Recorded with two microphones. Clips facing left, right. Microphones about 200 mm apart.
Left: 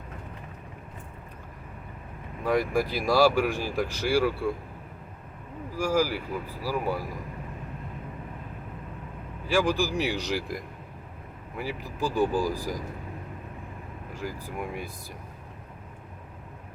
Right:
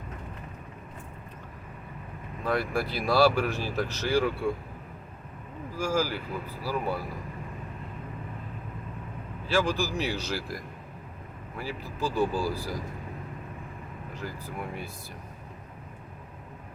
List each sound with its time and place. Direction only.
2.4 s speech: 15° left (ahead or behind)
5.7 s speech: 15° left (ahead or behind)
9.5 s speech: 15° left (ahead or behind)
14.1 s speech: 10° left (ahead or behind)